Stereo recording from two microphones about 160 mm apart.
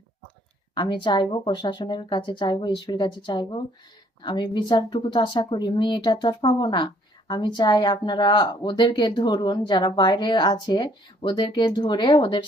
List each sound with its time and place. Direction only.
0.7 s speech: 30° left (ahead or behind)